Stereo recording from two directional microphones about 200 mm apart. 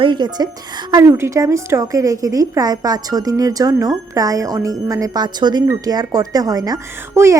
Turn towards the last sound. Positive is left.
turn(degrees=-15)  # may be behind; listen again after turning